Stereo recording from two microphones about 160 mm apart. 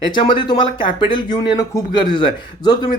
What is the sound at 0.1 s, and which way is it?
A man's voice, 30° left (ahead or behind).